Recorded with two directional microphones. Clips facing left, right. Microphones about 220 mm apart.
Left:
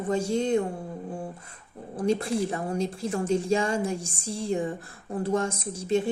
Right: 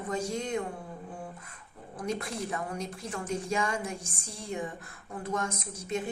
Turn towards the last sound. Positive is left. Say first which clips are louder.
# left 8 dB
turn(degrees=30)  # may be behind; listen again after turning